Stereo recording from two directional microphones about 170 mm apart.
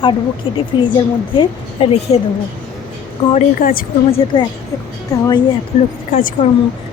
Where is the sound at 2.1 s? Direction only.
35° left (ahead or behind).